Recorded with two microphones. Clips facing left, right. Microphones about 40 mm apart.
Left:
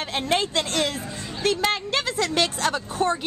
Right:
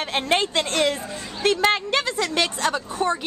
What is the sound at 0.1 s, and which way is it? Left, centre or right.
A woman's voice, right.